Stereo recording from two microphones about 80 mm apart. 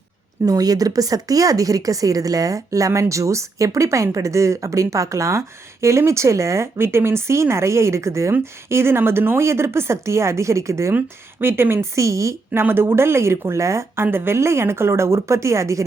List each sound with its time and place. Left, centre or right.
0.4 s speech: right
10.9 s speech: right